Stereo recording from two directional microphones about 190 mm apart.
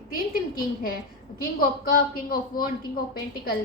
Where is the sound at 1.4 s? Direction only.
50° left (ahead or behind).